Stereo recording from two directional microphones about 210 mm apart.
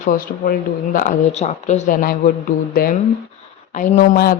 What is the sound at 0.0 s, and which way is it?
Speech, 40° left (ahead or behind).